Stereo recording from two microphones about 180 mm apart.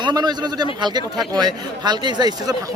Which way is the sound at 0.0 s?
25° right (ahead or behind).